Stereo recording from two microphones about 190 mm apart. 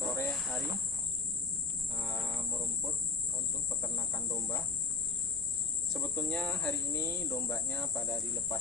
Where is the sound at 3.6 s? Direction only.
15° left (ahead or behind).